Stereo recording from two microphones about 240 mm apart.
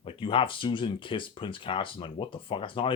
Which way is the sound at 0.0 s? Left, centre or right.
Left.